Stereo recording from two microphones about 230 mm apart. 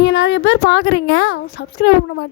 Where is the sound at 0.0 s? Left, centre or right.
Left.